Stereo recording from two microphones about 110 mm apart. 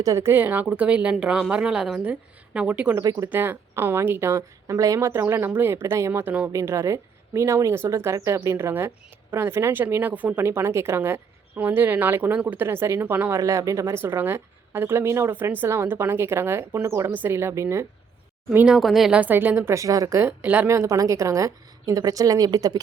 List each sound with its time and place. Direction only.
0.0 s a woman's voice: 25° right (ahead or behind)
2.9 s speech: 30° right (ahead or behind)
3.2 s speech: 20° right (ahead or behind)
6.5 s speech: 25° right (ahead or behind)
18.5 s speech: 10° right (ahead or behind)
19.2 s speech: 15° right (ahead or behind); by 22.8 s 35° right (ahead or behind)